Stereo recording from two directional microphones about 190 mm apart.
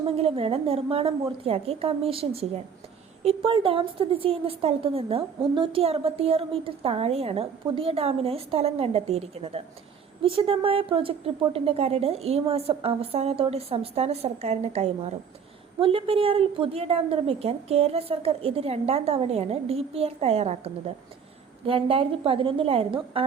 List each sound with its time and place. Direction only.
0.2 s a woman's voice: 30° right (ahead or behind)